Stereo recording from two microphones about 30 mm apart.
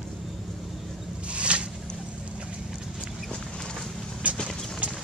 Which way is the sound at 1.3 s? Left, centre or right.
Right.